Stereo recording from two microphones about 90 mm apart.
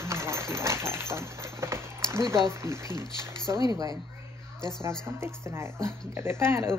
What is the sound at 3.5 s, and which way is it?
Speech, 45° right (ahead or behind).